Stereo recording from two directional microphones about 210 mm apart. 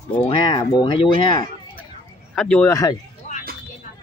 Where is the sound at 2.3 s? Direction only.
5° left (ahead or behind).